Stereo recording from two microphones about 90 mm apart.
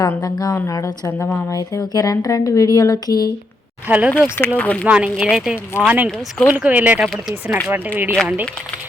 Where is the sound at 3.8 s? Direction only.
15° right (ahead or behind).